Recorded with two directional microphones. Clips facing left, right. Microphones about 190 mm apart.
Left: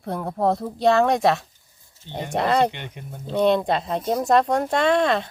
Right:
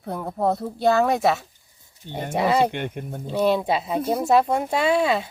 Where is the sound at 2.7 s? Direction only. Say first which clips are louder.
Right 8 dB; 50° right (ahead or behind).